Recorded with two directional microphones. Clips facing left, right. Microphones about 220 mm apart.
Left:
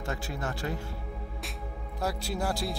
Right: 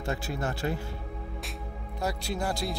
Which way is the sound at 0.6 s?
25° right (ahead or behind).